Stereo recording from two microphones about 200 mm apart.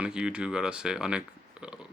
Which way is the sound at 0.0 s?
5° right (ahead or behind).